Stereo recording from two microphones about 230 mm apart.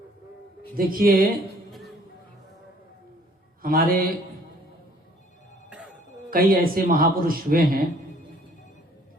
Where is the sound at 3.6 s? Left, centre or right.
Right.